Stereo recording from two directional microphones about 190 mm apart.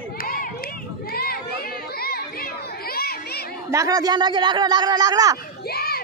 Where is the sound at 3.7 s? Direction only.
20° right (ahead or behind).